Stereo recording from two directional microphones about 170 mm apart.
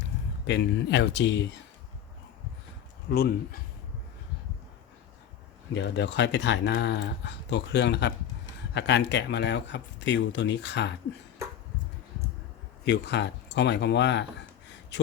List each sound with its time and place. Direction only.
0.4 s speech: 90° left
3.1 s speech: 65° left (ahead or behind)
5.7 s speech: 90° left
12.8 s speech: 90° left